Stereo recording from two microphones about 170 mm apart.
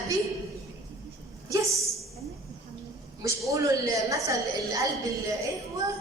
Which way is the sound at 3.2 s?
20° right (ahead or behind).